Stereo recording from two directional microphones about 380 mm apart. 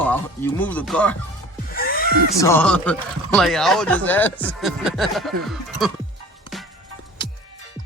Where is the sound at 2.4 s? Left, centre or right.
Centre.